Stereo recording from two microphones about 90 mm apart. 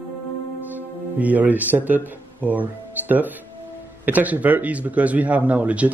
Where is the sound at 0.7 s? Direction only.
15° right (ahead or behind).